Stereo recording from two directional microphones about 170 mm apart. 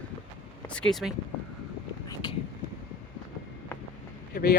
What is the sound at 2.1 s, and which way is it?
Vehicle, 25° left (ahead or behind).